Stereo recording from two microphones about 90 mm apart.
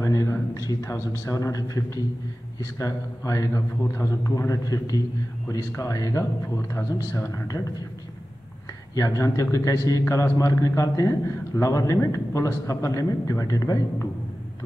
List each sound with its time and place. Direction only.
0.0 s a man's voice: 35° left (ahead or behind)
2.8 s a man's voice: 35° left (ahead or behind)
8.9 s a man's voice: 40° left (ahead or behind)